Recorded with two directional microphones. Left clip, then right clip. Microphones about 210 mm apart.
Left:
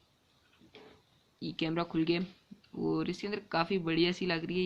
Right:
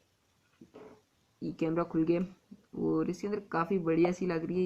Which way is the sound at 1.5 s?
40° left (ahead or behind).